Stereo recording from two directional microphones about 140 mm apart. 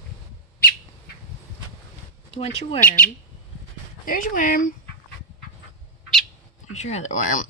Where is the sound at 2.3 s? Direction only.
45° left (ahead or behind).